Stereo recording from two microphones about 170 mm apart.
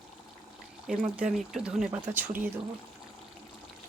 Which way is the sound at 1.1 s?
5° right (ahead or behind).